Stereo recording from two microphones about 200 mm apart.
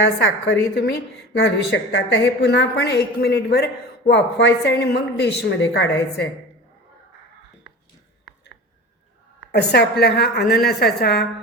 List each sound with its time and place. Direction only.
0.2 s a woman's voice: 65° left (ahead or behind)
9.5 s a woman's voice: 55° left (ahead or behind)